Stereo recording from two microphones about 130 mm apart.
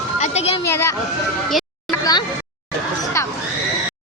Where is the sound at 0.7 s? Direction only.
20° left (ahead or behind).